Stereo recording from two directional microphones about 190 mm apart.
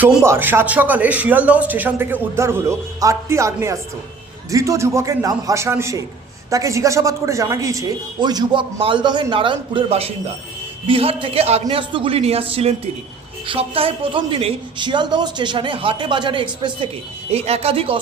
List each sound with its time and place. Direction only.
0.0 s a man's voice: 10° right (ahead or behind); by 18.0 s 30° right (ahead or behind)